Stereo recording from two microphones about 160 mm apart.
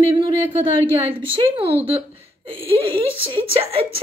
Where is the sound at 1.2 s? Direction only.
35° right (ahead or behind).